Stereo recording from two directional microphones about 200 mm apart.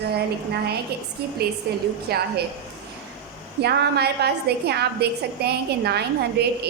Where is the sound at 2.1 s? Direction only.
50° right (ahead or behind).